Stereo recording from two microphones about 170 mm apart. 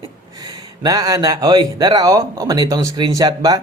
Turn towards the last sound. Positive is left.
turn(degrees=-20)  # may be behind; listen again after turning